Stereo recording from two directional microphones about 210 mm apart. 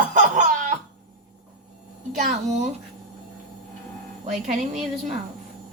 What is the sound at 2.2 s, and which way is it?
Speech, 35° right (ahead or behind).